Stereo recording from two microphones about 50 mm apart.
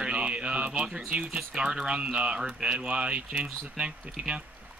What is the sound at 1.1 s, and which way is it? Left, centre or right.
Speech, right.